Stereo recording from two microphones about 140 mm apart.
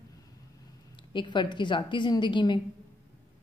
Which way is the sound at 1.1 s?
35° left (ahead or behind).